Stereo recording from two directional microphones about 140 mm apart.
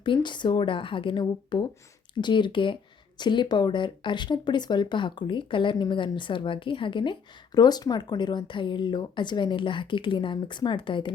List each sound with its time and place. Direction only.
0.0 s speech: 35° left (ahead or behind)